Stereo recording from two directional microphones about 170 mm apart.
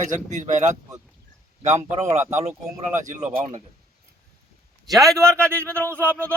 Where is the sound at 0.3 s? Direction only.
45° right (ahead or behind).